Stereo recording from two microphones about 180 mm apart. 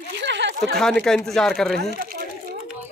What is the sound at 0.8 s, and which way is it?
Speech, 5° left (ahead or behind).